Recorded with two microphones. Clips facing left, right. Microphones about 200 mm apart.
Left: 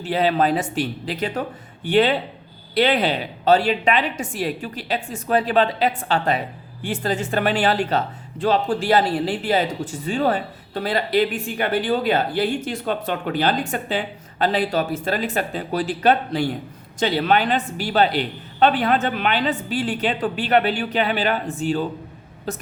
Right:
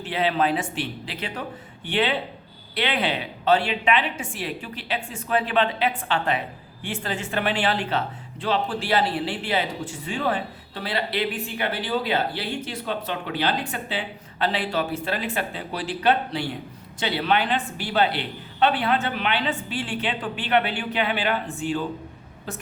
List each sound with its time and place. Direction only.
0.0 s speech: 40° left (ahead or behind)